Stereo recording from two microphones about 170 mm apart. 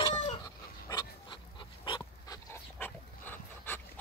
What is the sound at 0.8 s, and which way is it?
Dog, 25° left (ahead or behind).